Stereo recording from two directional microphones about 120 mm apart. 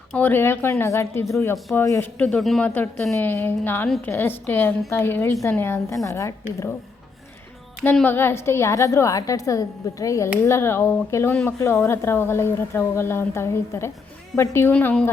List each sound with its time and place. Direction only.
0.1 s speech: 15° left (ahead or behind)
2.1 s a woman's voice: 10° left (ahead or behind); by 6.3 s 25° left (ahead or behind)
8.0 s a woman's voice: 20° left (ahead or behind)